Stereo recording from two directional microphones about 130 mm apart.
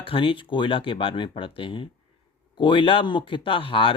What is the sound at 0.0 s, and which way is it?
Speech, 40° left (ahead or behind).